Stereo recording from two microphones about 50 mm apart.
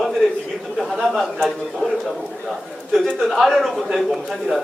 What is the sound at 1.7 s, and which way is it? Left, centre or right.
A man's voice, centre.